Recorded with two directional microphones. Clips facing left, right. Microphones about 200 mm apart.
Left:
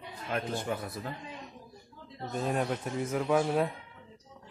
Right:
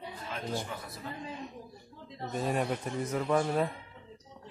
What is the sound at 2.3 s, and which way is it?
A man's voice, 5° right (ahead or behind).